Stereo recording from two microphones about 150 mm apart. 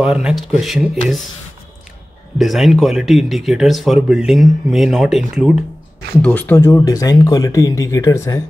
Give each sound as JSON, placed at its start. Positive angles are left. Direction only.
{"t": 0.0, "sound": "speech", "side_deg": -5}
{"t": 2.3, "sound": "speech", "side_deg": 0}
{"t": 6.2, "sound": "speech", "side_deg": 10}